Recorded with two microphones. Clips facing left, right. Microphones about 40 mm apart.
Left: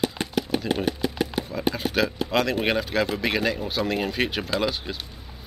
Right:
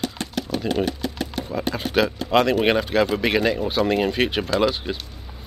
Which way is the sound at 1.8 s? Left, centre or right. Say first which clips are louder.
Right 6 dB; centre.